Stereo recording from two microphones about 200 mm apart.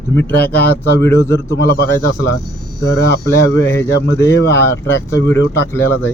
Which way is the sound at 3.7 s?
15° left (ahead or behind).